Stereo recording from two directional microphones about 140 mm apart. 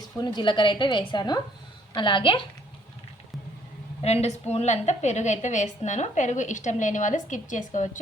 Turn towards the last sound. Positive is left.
turn(degrees=65)  # may be behind; listen again after turning